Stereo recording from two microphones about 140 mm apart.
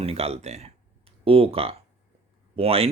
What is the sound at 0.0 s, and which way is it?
Speech, 45° right (ahead or behind).